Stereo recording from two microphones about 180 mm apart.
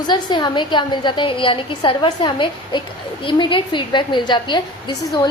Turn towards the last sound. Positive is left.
turn(degrees=25)  # may be behind; listen again after turning